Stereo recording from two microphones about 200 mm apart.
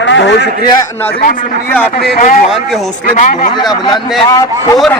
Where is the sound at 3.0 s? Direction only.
40° left (ahead or behind).